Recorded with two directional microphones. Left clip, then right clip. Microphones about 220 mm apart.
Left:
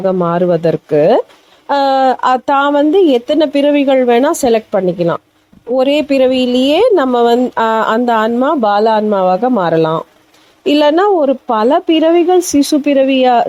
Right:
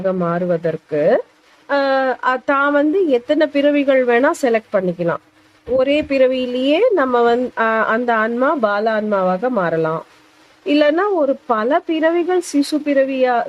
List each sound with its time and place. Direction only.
0.0 s a woman's voice: 20° left (ahead or behind)